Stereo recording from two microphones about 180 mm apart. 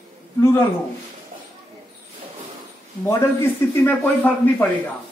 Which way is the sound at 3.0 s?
10° left (ahead or behind).